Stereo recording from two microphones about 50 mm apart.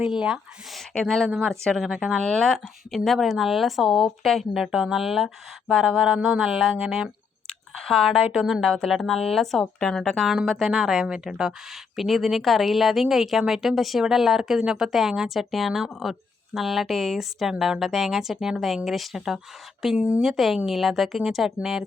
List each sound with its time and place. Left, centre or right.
0.0 s speech: centre
1.0 s speech: centre
6.1 s speech: centre
7.4 s a sound: centre
8.6 s speech: centre
10.2 s speech: centre
20.0 s speech: right
20.2 s speech: centre